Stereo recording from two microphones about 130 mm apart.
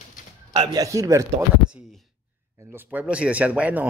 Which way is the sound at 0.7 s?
25° right (ahead or behind).